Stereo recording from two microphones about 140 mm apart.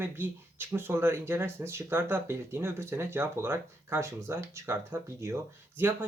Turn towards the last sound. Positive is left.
turn(degrees=-15)  # may be behind; listen again after turning